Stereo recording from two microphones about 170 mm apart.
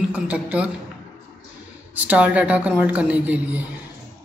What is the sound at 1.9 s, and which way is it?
Speech, 10° right (ahead or behind).